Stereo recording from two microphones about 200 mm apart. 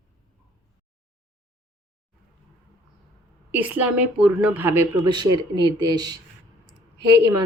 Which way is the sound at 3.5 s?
10° right (ahead or behind).